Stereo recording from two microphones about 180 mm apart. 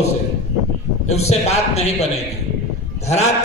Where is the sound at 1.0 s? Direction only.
35° left (ahead or behind).